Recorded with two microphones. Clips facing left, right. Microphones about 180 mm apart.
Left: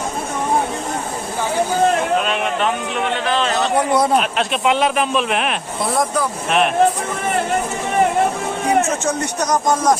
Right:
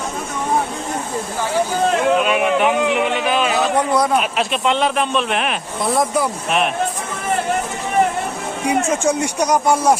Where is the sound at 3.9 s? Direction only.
25° left (ahead or behind).